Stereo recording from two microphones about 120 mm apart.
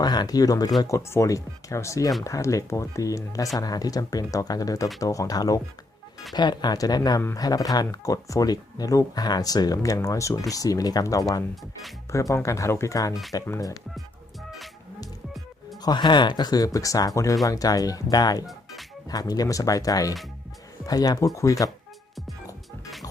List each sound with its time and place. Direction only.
0.0 s speech: 35° left (ahead or behind)
15.8 s speech: 40° left (ahead or behind)